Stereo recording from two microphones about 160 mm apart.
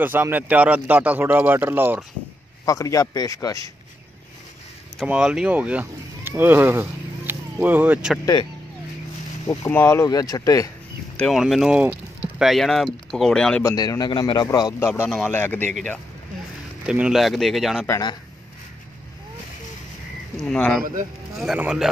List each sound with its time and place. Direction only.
0.0 s speech: 10° right (ahead or behind)
2.6 s a man's voice: 20° left (ahead or behind)
4.9 s speech: 5° right (ahead or behind)
9.7 s a man's voice: 15° left (ahead or behind)
11.1 s speech: centre (ahead or behind)
13.7 s a man's voice: 25° left (ahead or behind)
15.2 s a man's voice: 15° left (ahead or behind)
16.8 s speech: 5° right (ahead or behind)
17.8 s a man's voice: 20° left (ahead or behind)
20.4 s speech: 5° left (ahead or behind)
20.8 s speech: 50° right (ahead or behind)
21.4 s speech: 5° right (ahead or behind)